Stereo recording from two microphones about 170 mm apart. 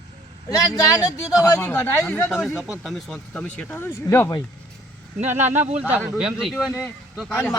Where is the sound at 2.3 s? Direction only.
Centre (ahead or behind); by 4.4 s 20° left (ahead or behind).